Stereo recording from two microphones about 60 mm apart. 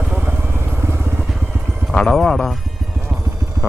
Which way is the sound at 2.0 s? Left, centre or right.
Centre.